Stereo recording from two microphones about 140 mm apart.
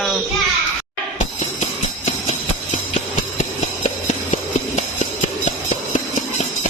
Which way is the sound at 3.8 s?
60° left (ahead or behind).